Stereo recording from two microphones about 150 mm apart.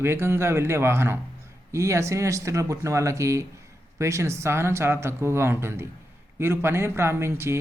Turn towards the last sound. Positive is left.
turn(degrees=-15)  # may be behind; listen again after turning